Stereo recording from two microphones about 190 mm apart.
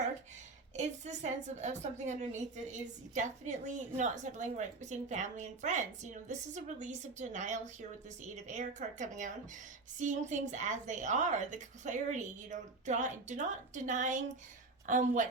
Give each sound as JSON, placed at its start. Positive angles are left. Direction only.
{"t": 0.8, "sound": "a woman's voice", "side_deg": -40}